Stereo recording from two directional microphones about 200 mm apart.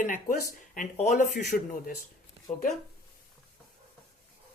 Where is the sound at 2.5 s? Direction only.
15° left (ahead or behind).